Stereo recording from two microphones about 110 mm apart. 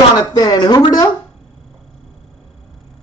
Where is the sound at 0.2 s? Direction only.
40° left (ahead or behind).